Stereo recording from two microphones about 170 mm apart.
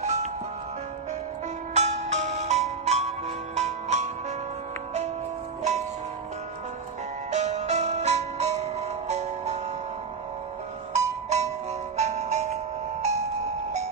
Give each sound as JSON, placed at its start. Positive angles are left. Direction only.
{"t": 0.0, "sound": "music", "side_deg": -40}
{"t": 1.7, "sound": "music", "side_deg": -40}
{"t": 5.6, "sound": "music", "side_deg": -40}
{"t": 7.2, "sound": "music", "side_deg": -40}
{"t": 11.0, "sound": "music", "side_deg": -40}